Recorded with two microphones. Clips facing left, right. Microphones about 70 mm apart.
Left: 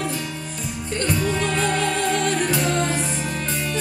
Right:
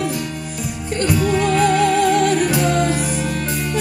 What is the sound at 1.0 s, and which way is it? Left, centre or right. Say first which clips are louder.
Music: right 6 dB; centre.